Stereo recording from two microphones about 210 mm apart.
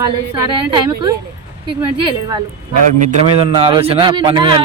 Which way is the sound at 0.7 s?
20° right (ahead or behind).